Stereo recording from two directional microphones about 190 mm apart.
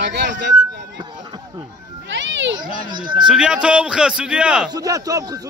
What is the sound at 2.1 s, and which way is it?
Cat, 70° right (ahead or behind).